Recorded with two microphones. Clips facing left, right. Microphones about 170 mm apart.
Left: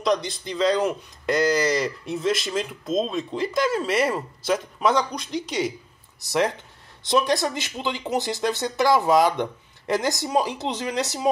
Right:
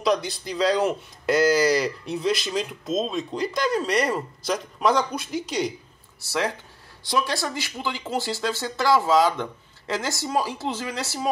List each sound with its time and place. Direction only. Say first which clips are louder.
0.0 s speech: even; centre (ahead or behind)
6.2 s speech: left 4 dB; 20° left (ahead or behind)